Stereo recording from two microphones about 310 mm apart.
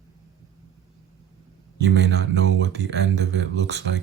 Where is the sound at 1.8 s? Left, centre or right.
Right.